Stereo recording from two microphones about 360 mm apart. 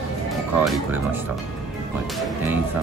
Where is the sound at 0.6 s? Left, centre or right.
Centre.